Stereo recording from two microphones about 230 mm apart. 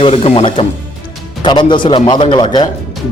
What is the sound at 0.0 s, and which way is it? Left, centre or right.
Speech, left.